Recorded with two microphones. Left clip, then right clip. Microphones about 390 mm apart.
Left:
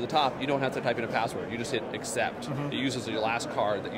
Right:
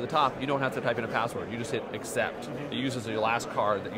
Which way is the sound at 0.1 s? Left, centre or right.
Right.